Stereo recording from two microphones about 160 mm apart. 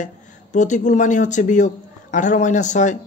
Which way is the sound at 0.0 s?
50° left (ahead or behind).